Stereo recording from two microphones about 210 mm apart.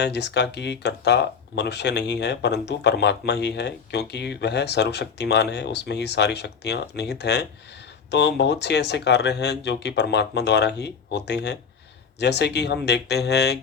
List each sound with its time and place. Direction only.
0.0 s speech: 55° left (ahead or behind)